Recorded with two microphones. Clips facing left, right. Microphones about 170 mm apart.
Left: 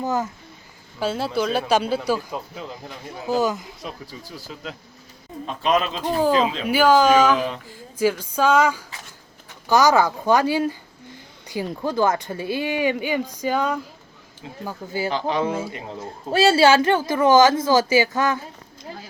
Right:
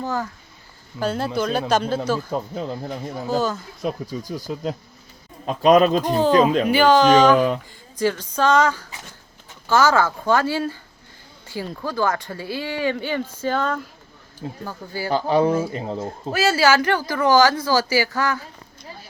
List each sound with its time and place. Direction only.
0.0 s speech: 20° left (ahead or behind)
0.9 s speech: 5° left (ahead or behind)
2.3 s speech: 40° right (ahead or behind)
3.2 s speech: 15° left (ahead or behind)
4.0 s speech: 15° right (ahead or behind)
5.5 s speech: 40° right (ahead or behind)
6.7 s speech: 5° left (ahead or behind)
15.1 s speech: 35° right (ahead or behind)
16.3 s speech: 30° left (ahead or behind)